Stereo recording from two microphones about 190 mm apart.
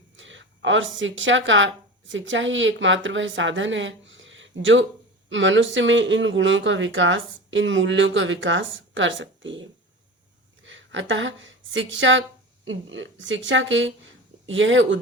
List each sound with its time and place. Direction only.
0.2 s a woman's voice: 80° right